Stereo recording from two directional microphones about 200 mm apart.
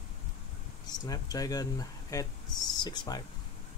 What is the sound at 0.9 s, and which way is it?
Speech, 20° left (ahead or behind).